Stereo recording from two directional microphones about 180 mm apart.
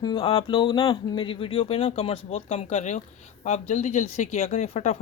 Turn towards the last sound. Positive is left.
turn(degrees=40)  # may be behind; listen again after turning